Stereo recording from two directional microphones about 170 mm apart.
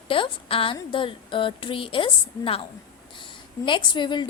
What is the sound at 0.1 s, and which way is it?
A woman's voice, 30° left (ahead or behind).